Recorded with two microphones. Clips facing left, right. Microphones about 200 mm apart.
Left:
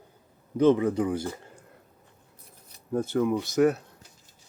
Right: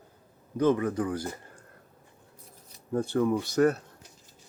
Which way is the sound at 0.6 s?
20° left (ahead or behind).